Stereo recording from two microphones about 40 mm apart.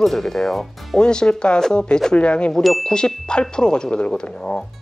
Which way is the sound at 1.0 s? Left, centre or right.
Left.